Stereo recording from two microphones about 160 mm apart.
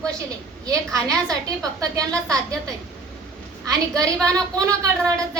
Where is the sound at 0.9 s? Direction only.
20° right (ahead or behind).